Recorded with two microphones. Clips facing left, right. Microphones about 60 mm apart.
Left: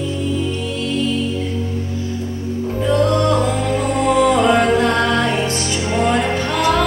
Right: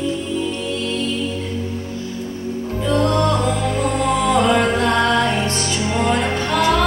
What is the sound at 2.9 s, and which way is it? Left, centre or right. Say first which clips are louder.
Music: left 1 dB; centre.